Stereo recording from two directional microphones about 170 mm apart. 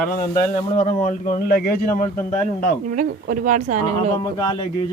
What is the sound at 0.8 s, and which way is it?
Speech, 45° left (ahead or behind).